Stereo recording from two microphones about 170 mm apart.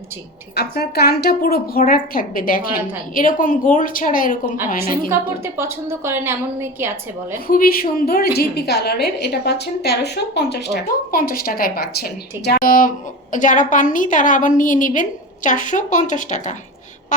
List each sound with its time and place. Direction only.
0.5 s a woman's voice: 65° left (ahead or behind)
5.5 s a woman's voice: 15° right (ahead or behind)
7.4 s a woman's voice: 60° left (ahead or behind)
17.1 s a sound: 50° left (ahead or behind)